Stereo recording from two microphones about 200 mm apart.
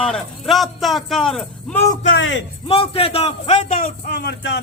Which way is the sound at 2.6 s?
30° left (ahead or behind).